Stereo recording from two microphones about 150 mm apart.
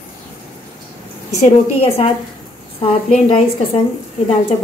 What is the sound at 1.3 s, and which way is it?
Speech, 45° left (ahead or behind).